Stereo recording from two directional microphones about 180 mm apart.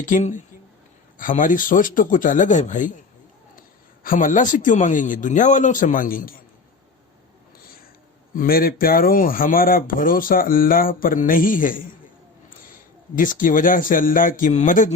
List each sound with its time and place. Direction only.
0.0 s speech: 45° left (ahead or behind)
4.0 s speech: 50° left (ahead or behind)
8.4 s speech: 55° left (ahead or behind)
13.1 s speech: 50° left (ahead or behind)